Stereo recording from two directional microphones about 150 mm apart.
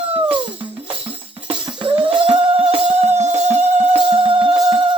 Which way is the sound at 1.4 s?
35° right (ahead or behind).